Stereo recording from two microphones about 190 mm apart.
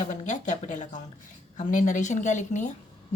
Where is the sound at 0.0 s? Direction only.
40° left (ahead or behind).